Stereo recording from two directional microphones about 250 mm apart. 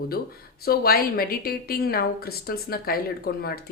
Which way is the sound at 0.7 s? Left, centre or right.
Left.